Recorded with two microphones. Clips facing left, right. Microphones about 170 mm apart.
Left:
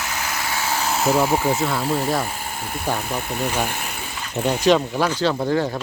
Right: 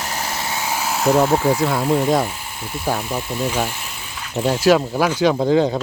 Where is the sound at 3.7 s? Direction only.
55° left (ahead or behind).